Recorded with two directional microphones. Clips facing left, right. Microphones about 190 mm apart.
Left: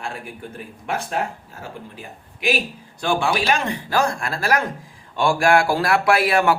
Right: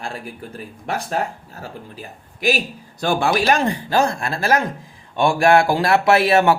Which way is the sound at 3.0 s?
40° right (ahead or behind).